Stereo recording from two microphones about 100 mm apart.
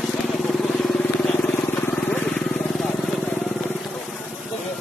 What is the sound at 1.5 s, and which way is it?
Vehicle, 15° left (ahead or behind).